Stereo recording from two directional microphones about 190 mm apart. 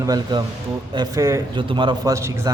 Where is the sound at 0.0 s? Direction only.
20° right (ahead or behind).